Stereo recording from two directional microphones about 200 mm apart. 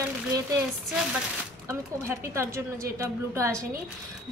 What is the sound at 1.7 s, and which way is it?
A woman's voice, 15° right (ahead or behind).